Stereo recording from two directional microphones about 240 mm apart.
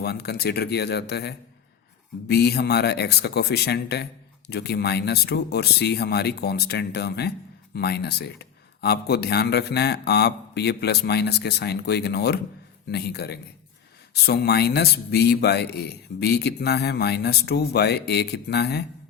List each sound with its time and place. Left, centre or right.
0.0 s speech: left